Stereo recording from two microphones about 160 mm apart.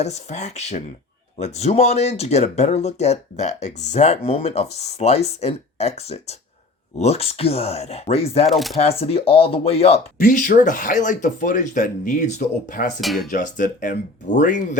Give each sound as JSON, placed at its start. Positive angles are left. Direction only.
{"t": 0.0, "sound": "speech", "side_deg": 45}
{"t": 8.4, "sound": "speech", "side_deg": 0}
{"t": 8.8, "sound": "speech", "side_deg": 40}
{"t": 10.2, "sound": "speech", "side_deg": 55}
{"t": 13.0, "sound": "speech", "side_deg": 0}
{"t": 13.3, "sound": "speech", "side_deg": 55}